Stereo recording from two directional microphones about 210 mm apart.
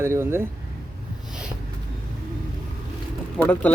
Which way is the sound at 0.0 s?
10° right (ahead or behind).